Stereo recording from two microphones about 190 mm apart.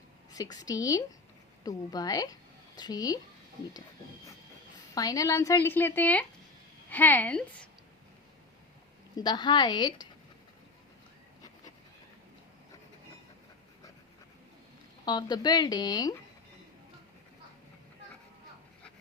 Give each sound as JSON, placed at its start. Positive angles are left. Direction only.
{"t": 0.3, "sound": "a woman's voice", "side_deg": 20}
{"t": 4.9, "sound": "a woman's voice", "side_deg": 20}
{"t": 9.1, "sound": "speech", "side_deg": 20}
{"t": 15.0, "sound": "speech", "side_deg": 20}